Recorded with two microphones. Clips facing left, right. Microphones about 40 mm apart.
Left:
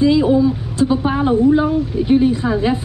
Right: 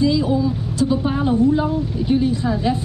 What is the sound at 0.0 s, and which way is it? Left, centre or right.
Speech, left.